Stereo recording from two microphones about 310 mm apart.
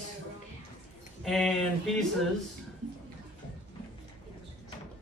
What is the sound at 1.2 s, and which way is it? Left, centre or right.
Speech, centre.